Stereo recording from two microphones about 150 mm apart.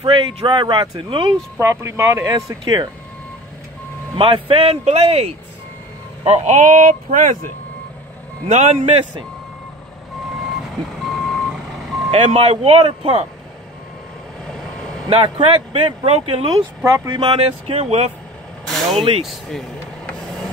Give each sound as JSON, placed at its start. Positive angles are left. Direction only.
{"t": 0.0, "sound": "speech", "side_deg": -35}
{"t": 1.6, "sound": "speech", "side_deg": -20}
{"t": 4.2, "sound": "speech", "side_deg": -35}
{"t": 8.5, "sound": "a man's voice", "side_deg": -50}
{"t": 11.1, "sound": "reversing beeps", "side_deg": 0}
{"t": 12.1, "sound": "speech", "side_deg": -40}
{"t": 14.5, "sound": "vehicle", "side_deg": 5}
{"t": 15.0, "sound": "speech", "side_deg": -35}
{"t": 16.4, "sound": "speech", "side_deg": -30}
{"t": 17.2, "sound": "speech", "side_deg": -40}
{"t": 18.7, "sound": "speech", "side_deg": 0}